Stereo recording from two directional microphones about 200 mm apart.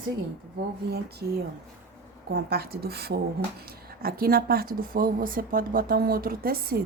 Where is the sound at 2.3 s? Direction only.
55° right (ahead or behind).